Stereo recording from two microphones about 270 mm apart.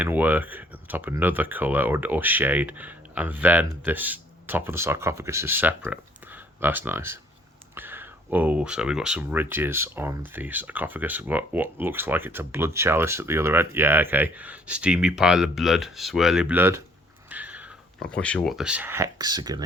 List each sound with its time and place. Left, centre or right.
0.0 s speech: centre